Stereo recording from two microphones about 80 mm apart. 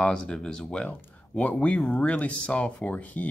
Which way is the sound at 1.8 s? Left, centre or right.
Centre.